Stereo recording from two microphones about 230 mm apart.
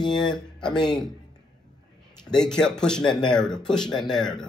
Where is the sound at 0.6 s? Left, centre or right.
Centre.